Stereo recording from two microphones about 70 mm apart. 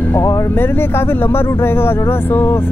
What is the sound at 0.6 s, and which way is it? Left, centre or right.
Speech, left.